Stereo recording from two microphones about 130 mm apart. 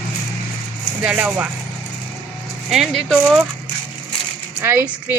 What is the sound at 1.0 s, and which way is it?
Speech, 10° right (ahead or behind).